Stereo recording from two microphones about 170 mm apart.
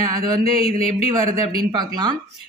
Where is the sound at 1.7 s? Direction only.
25° right (ahead or behind).